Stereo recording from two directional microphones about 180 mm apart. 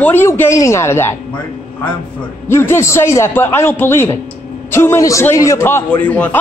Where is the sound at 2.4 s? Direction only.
15° left (ahead or behind).